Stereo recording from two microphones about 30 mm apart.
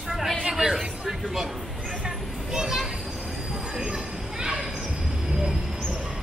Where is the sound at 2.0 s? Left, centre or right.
Right.